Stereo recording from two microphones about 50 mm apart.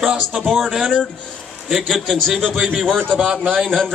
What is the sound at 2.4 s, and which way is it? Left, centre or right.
Speech, centre.